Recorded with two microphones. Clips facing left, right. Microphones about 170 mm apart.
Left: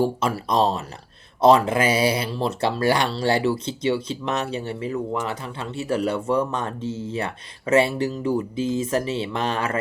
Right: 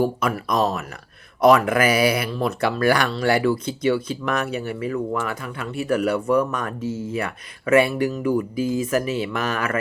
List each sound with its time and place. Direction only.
0.0 s speech: 30° left (ahead or behind)